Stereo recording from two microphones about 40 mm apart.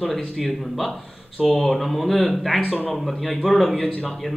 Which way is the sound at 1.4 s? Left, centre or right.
Centre.